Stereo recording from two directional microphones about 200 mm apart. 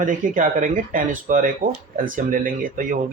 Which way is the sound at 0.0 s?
40° right (ahead or behind).